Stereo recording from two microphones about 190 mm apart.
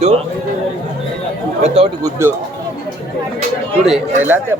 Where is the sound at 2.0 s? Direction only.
15° right (ahead or behind).